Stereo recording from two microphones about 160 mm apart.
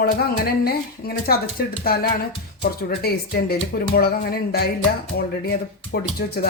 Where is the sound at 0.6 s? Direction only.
75° left (ahead or behind).